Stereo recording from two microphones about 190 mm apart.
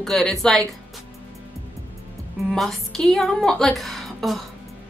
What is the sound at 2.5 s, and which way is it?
Speech, centre (ahead or behind).